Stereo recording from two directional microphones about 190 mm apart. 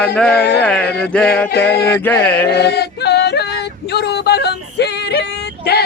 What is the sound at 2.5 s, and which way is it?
Yodeling, 60° left (ahead or behind).